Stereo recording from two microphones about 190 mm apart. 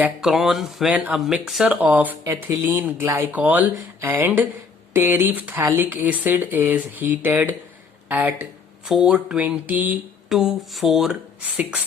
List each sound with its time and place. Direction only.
0.0 s speech: centre (ahead or behind)